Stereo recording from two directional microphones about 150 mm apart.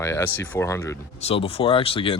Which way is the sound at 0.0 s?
20° left (ahead or behind).